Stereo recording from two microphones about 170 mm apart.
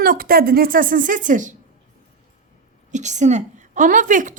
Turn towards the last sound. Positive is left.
turn(degrees=-50)  # may be behind; listen again after turning